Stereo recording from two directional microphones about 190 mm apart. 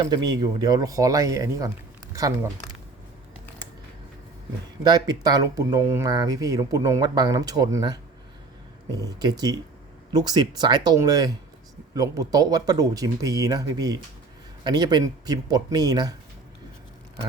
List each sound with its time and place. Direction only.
0.0 s speech: 20° right (ahead or behind)
4.8 s speech: 20° right (ahead or behind)
9.0 s speech: 20° right (ahead or behind)